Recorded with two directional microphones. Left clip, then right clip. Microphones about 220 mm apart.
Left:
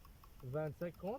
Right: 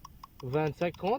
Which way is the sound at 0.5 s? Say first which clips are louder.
Right 12 dB; 50° right (ahead or behind).